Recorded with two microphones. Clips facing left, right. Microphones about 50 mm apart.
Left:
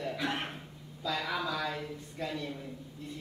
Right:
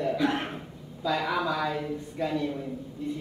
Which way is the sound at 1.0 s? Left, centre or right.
Centre.